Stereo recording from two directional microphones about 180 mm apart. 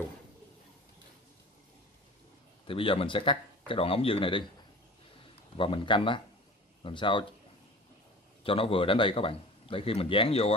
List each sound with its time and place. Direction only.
2.6 s speech: 30° left (ahead or behind)
5.6 s speech: 30° left (ahead or behind)
8.5 s a man's voice: 30° left (ahead or behind)